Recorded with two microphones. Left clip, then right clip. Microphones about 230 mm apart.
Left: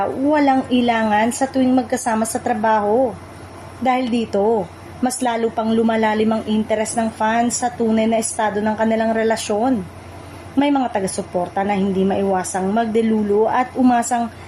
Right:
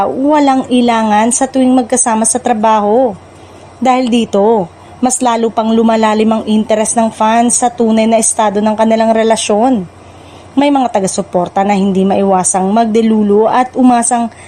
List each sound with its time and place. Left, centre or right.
0.0 s a woman's voice: right